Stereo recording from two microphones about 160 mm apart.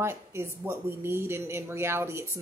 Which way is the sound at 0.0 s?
15° right (ahead or behind).